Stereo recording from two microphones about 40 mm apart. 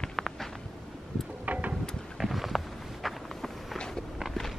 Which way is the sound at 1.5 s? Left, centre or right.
Right.